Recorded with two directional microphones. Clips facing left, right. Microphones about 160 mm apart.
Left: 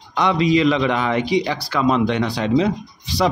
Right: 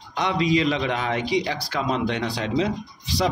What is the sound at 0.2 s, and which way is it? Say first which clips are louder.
A man's voice: left 5 dB; 90° left.